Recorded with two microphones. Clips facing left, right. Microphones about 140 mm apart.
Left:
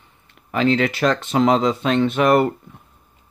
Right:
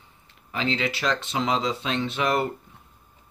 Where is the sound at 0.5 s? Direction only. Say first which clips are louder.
Left 9 dB; 55° left (ahead or behind).